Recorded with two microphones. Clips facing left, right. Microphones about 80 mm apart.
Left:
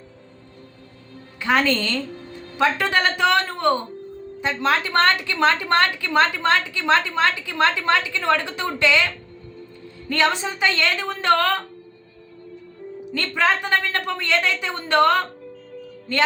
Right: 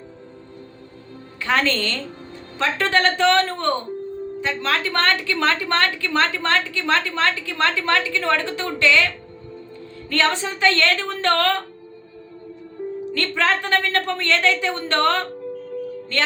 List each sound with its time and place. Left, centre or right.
1.4 s a woman's voice: centre
10.1 s a woman's voice: centre
13.1 s a woman's voice: centre